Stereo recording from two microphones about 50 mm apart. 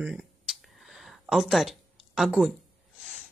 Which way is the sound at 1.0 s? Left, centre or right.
Centre.